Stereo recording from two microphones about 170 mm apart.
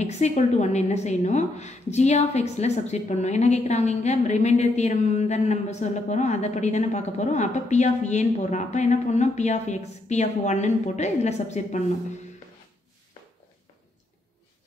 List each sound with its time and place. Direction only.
0.0 s a woman's voice: 40° left (ahead or behind)